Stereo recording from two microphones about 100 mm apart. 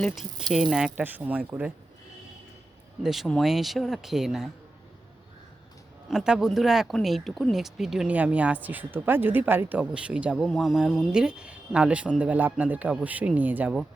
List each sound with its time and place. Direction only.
0.5 s speech: 5° right (ahead or behind)
3.0 s speech: 5° right (ahead or behind)
6.1 s speech: 5° right (ahead or behind)
10.3 s speech: centre (ahead or behind); by 13.7 s 15° right (ahead or behind)